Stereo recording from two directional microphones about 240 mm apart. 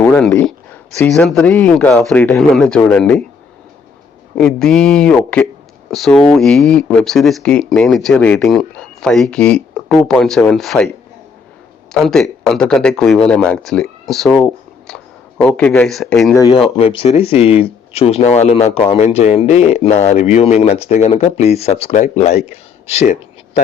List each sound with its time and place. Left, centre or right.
0.0 s speech: centre
4.4 s speech: centre
11.9 s speech: centre
16.4 s speech: centre